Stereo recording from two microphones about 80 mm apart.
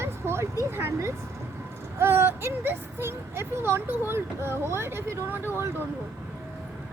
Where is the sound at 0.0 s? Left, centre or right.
Right.